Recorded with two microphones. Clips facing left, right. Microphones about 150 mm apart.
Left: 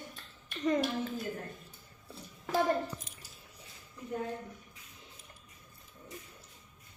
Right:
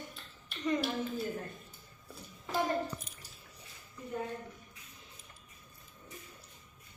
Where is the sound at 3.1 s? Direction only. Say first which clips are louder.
Even; 90° left.